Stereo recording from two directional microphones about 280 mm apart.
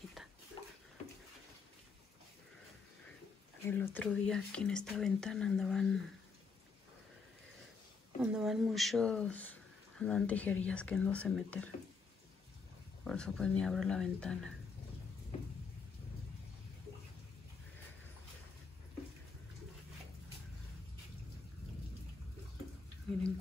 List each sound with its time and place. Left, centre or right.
0.6 s a sound: centre
3.6 s speech: centre
8.2 s speech: centre
13.0 s speech: centre